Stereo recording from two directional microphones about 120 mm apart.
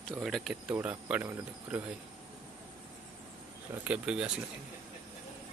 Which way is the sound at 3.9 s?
10° right (ahead or behind).